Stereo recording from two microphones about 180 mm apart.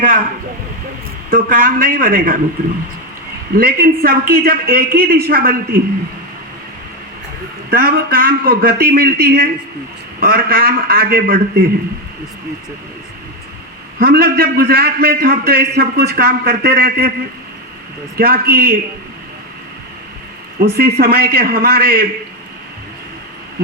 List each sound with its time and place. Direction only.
1.3 s a man's voice: 50° right (ahead or behind)
3.5 s a man's voice: 55° right (ahead or behind)
7.7 s a man's voice: 55° right (ahead or behind)
14.0 s a man's voice: 55° right (ahead or behind)
18.2 s a man's voice: 55° right (ahead or behind)
20.6 s a man's voice: 60° right (ahead or behind)